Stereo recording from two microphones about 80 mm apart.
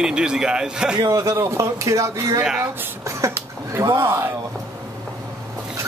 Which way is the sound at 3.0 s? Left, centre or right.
Right.